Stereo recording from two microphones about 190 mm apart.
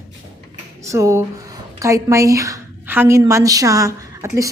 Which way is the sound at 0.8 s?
15° right (ahead or behind).